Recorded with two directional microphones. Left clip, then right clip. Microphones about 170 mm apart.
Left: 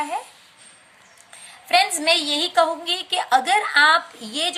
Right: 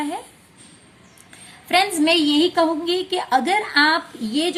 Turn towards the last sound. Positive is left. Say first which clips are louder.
# right 2 dB
turn(degrees=30)  # may be behind; listen again after turning